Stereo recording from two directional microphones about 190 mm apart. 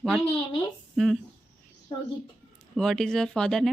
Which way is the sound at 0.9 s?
Centre (ahead or behind).